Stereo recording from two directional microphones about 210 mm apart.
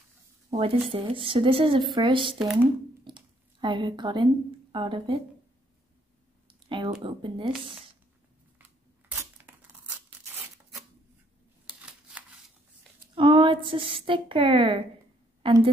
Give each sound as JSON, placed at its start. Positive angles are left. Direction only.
{"t": 0.5, "sound": "speech", "side_deg": -25}
{"t": 2.3, "sound": "speech", "side_deg": -5}
{"t": 3.1, "sound": "a sound", "side_deg": -20}
{"t": 4.7, "sound": "speech", "side_deg": -25}
{"t": 6.4, "sound": "a sound", "side_deg": -25}
{"t": 7.0, "sound": "speech", "side_deg": -25}
{"t": 9.1, "sound": "tearing", "side_deg": -10}
{"t": 11.6, "sound": "a sound", "side_deg": -5}
{"t": 13.1, "sound": "a woman's voice", "side_deg": -25}